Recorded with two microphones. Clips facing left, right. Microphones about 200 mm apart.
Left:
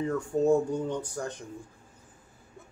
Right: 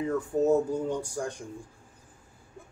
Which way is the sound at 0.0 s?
5° right (ahead or behind).